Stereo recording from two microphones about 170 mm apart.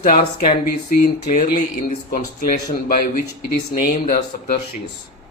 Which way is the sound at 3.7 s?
50° left (ahead or behind).